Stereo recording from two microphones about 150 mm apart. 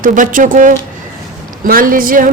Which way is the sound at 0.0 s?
60° right (ahead or behind).